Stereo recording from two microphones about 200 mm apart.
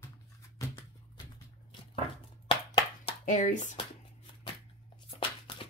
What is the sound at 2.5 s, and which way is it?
Clapping, 25° left (ahead or behind).